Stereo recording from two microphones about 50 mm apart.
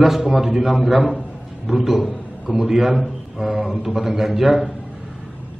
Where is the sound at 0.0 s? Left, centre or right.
Centre.